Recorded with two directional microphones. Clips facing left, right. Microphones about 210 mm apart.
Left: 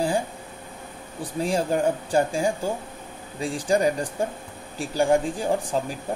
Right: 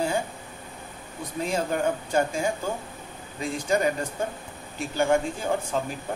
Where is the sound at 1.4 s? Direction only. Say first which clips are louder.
Left 3 dB; 35° left (ahead or behind).